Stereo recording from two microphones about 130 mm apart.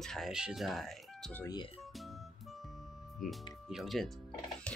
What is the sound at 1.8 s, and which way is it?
Music, centre (ahead or behind).